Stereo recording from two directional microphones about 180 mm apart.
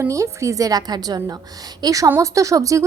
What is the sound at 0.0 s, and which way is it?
A woman's voice, 15° right (ahead or behind).